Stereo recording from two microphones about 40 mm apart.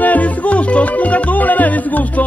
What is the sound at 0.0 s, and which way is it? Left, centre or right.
Music, left.